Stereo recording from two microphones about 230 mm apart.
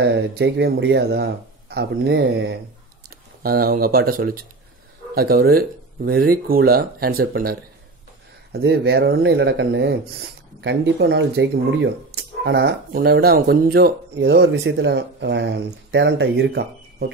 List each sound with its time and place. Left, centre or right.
0.0 s speech: right